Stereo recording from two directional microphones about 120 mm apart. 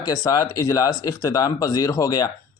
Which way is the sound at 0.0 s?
30° left (ahead or behind).